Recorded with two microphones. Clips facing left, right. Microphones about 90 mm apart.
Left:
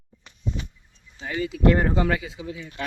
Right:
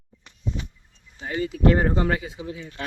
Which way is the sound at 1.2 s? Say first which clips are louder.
Right 1 dB; 35° right (ahead or behind).